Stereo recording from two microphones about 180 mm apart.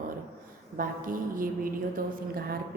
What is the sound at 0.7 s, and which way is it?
A woman's voice, 50° right (ahead or behind).